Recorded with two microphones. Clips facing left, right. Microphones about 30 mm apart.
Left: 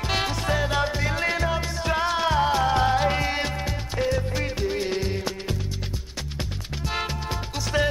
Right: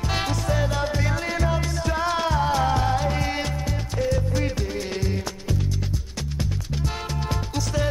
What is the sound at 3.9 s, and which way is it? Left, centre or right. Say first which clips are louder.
Music: even; left.